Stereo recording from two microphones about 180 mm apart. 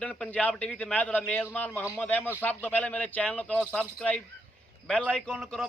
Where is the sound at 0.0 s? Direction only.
5° left (ahead or behind).